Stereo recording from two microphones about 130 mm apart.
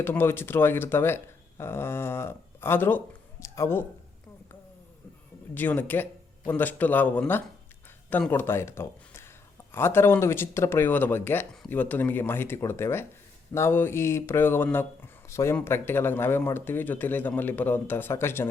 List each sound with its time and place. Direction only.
0.0 s speech: 15° left (ahead or behind)
5.5 s speech: 15° left (ahead or behind)